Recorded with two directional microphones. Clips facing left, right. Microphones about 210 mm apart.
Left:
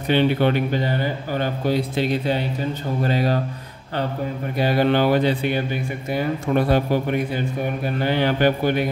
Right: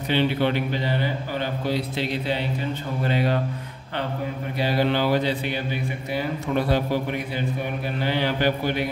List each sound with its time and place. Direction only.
0.1 s a man's voice: 50° left (ahead or behind)
4.6 s a man's voice: 50° left (ahead or behind)